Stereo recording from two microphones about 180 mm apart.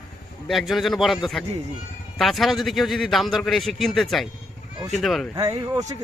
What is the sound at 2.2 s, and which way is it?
A man's voice, centre (ahead or behind).